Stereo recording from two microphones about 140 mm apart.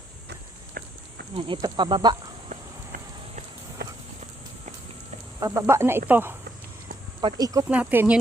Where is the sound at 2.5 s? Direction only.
60° right (ahead or behind).